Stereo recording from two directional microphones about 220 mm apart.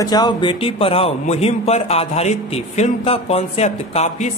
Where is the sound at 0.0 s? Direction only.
20° left (ahead or behind).